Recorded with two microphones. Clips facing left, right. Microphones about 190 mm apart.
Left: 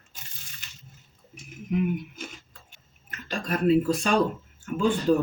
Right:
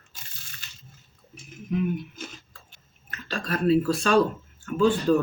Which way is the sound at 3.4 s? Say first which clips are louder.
Even; 15° left (ahead or behind).